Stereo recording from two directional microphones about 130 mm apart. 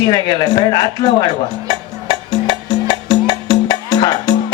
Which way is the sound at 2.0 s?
35° left (ahead or behind).